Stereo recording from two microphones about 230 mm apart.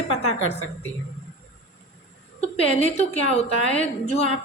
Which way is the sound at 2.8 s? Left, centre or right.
Left.